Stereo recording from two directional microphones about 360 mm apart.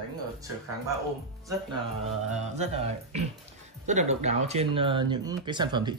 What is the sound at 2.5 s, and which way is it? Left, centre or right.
Speech, centre.